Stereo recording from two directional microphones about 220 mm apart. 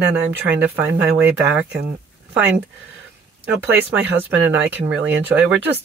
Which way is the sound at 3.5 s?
10° right (ahead or behind).